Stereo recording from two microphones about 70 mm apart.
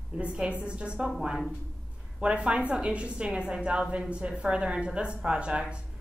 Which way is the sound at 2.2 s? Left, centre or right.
Centre.